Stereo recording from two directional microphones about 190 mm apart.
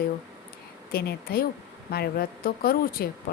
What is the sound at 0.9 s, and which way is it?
Speech, 55° left (ahead or behind).